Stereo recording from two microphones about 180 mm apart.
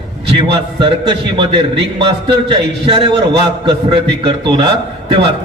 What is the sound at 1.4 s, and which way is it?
A man's voice, 30° right (ahead or behind).